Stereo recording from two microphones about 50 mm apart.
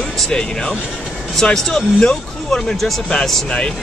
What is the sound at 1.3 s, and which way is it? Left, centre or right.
Speech, centre.